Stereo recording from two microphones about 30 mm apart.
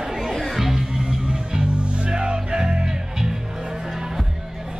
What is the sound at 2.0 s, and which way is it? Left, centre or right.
Music, right.